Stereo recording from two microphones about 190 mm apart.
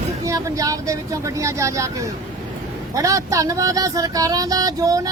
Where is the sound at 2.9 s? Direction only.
15° right (ahead or behind).